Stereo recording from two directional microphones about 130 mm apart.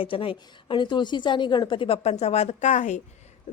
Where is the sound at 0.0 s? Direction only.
45° left (ahead or behind).